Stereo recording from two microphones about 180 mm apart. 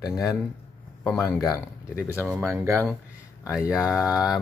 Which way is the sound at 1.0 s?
15° left (ahead or behind).